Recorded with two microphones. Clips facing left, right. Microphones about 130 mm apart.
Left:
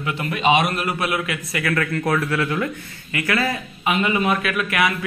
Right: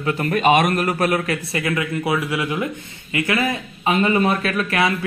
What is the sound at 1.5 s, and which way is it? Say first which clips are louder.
Speech: left 3 dB; 20° right (ahead or behind).